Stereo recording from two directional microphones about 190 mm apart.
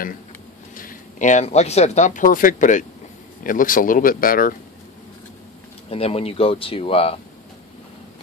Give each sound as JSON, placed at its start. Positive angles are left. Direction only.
{"t": 0.7, "sound": "speech", "side_deg": 45}
{"t": 5.9, "sound": "speech", "side_deg": 30}